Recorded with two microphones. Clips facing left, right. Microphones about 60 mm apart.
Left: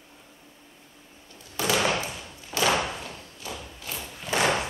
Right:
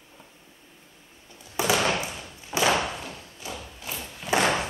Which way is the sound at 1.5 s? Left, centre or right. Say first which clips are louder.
Right 2 dB; centre.